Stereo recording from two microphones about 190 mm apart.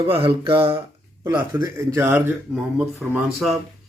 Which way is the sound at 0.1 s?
30° right (ahead or behind).